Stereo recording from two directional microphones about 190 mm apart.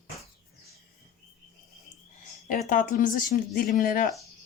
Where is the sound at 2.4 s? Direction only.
45° left (ahead or behind).